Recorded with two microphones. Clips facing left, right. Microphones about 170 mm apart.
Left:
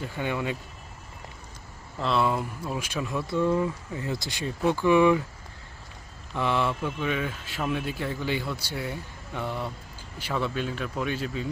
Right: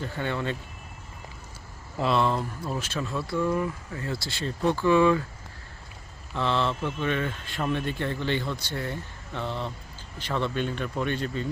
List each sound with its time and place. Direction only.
0.0 s speech: 10° left (ahead or behind)
2.0 s speech: 5° right (ahead or behind)
2.2 s speech: 5° left (ahead or behind)
6.3 s speech: 10° left (ahead or behind)